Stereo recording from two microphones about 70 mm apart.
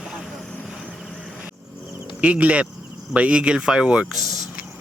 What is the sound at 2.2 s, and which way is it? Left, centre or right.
Speech, centre.